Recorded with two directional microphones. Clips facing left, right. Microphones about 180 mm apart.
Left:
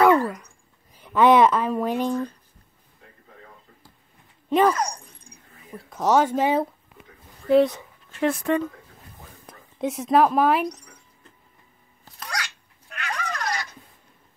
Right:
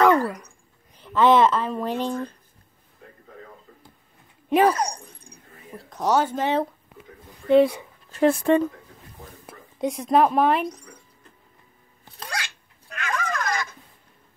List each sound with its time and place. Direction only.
0.1 s a sound: 35° right (ahead or behind)
0.9 s a woman's voice: 15° left (ahead or behind)
4.6 s speech: 30° right (ahead or behind)
5.9 s speech: 5° left (ahead or behind)
8.1 s speech: 35° right (ahead or behind)
9.5 s a woman's voice: centre (ahead or behind)
12.0 s cat: 25° right (ahead or behind)
12.9 s cat: 45° right (ahead or behind)